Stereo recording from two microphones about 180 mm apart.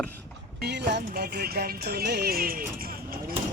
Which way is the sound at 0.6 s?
65° right (ahead or behind).